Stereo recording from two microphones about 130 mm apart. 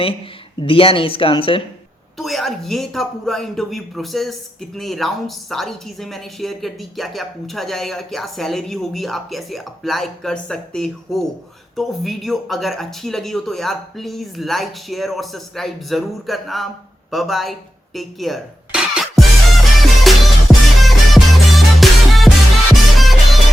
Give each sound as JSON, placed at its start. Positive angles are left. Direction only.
{"t": 0.6, "sound": "speech", "side_deg": 45}
{"t": 2.1, "sound": "speech", "side_deg": 0}
{"t": 17.9, "sound": "music", "side_deg": 0}